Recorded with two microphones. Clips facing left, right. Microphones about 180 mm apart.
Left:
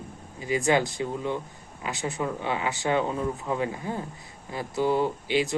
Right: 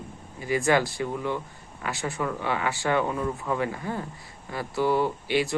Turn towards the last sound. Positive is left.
turn(degrees=20)  # may be behind; listen again after turning